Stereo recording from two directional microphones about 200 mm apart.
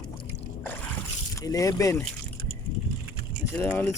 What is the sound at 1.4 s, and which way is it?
Speech, 15° left (ahead or behind).